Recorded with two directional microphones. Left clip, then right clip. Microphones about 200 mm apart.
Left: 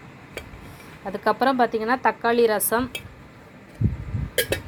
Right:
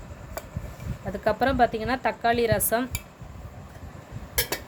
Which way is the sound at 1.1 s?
Centre (ahead or behind).